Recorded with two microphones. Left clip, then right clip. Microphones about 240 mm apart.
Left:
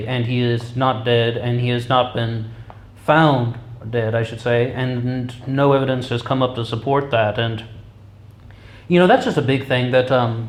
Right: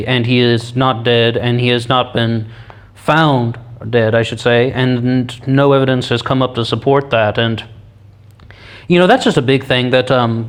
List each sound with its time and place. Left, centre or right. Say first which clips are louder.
0.0 s speech: right 9 dB; right